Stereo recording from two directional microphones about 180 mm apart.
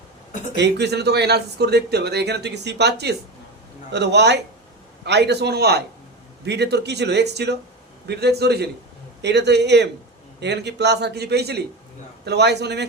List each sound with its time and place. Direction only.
0.5 s a man's voice: 70° right (ahead or behind)